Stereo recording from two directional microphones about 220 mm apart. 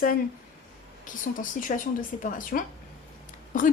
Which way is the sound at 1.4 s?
40° left (ahead or behind).